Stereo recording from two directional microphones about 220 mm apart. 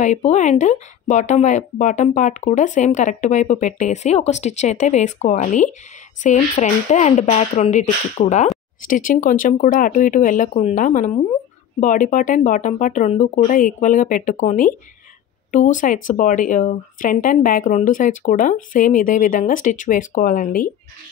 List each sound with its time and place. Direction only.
0.0 s speech: 30° left (ahead or behind)